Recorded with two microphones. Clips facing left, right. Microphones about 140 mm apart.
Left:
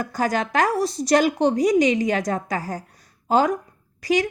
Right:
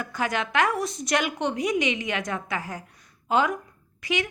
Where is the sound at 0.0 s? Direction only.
40° left (ahead or behind).